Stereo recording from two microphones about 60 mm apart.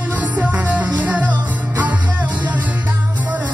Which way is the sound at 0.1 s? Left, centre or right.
Right.